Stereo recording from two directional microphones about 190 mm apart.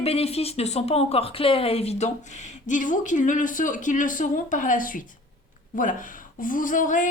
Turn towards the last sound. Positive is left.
turn(degrees=45)  # may be behind; listen again after turning